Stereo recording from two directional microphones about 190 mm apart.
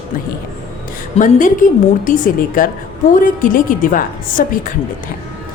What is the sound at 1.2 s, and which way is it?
A woman's voice, 35° left (ahead or behind).